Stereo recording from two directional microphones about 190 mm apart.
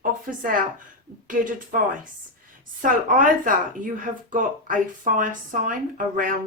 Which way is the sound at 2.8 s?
45° right (ahead or behind).